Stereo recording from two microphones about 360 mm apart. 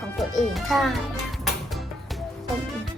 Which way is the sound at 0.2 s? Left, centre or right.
Centre.